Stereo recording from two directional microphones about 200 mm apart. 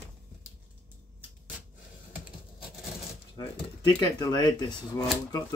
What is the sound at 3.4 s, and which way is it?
Speech, 20° left (ahead or behind).